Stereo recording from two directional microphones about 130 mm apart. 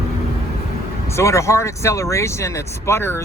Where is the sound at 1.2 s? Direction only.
20° left (ahead or behind).